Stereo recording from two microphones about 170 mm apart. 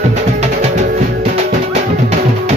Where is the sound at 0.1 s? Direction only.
40° right (ahead or behind).